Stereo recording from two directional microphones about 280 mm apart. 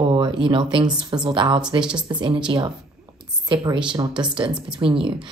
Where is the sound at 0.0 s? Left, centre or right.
Centre.